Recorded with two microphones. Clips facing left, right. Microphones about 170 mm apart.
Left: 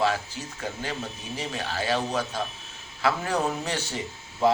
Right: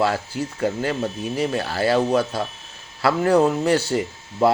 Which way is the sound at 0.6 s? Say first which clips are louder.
Right 10 dB; 60° right (ahead or behind).